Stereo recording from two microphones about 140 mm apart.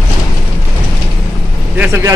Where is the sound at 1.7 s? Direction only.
10° right (ahead or behind).